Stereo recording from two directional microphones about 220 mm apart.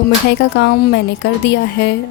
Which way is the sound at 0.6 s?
50° left (ahead or behind).